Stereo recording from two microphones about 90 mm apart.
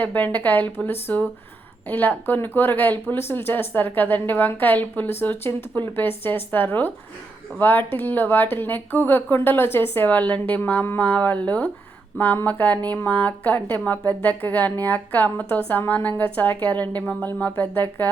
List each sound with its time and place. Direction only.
0.0 s speech: 20° left (ahead or behind)